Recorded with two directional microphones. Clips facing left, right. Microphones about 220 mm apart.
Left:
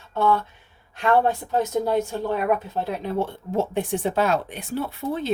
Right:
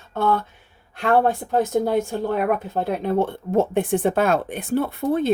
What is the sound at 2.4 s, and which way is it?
Speech, 55° right (ahead or behind).